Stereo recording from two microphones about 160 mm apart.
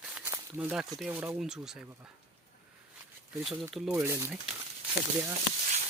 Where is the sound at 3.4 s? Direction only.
Centre (ahead or behind).